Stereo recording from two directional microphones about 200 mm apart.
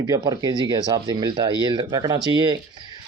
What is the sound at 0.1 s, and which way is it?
Speech, 20° right (ahead or behind).